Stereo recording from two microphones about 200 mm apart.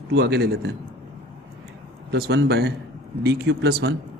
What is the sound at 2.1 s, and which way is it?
A man's voice, 55° right (ahead or behind).